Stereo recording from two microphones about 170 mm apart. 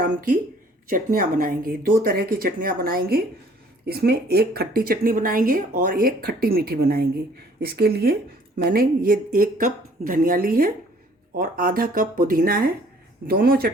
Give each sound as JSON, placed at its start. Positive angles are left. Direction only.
{"t": 0.0, "sound": "speech", "side_deg": -55}